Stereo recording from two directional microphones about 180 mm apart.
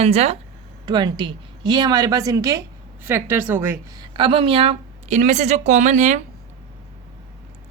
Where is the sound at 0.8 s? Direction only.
25° right (ahead or behind).